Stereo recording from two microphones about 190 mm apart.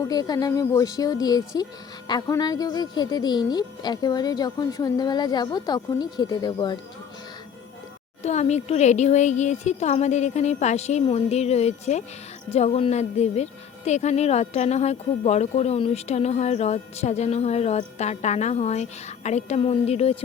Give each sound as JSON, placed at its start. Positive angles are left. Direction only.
{"t": 0.0, "sound": "speech", "side_deg": 20}
{"t": 8.2, "sound": "speech", "side_deg": 35}